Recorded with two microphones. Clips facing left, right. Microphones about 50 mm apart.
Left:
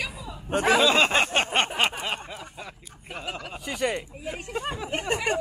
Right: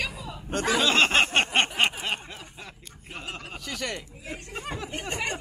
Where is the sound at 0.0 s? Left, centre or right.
Centre.